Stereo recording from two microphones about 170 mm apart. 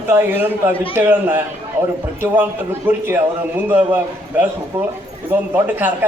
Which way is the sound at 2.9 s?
10° right (ahead or behind).